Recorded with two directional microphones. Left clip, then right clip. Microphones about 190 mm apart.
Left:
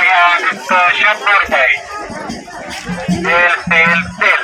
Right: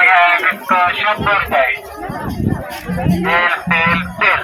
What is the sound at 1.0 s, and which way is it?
Speech, 30° right (ahead or behind).